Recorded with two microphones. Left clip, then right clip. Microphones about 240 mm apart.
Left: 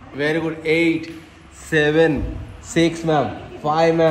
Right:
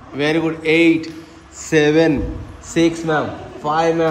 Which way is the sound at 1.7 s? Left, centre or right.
Centre.